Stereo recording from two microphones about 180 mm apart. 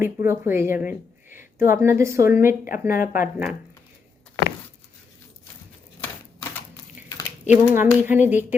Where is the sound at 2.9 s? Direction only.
50° left (ahead or behind).